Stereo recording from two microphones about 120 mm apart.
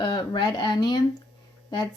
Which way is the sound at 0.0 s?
40° left (ahead or behind).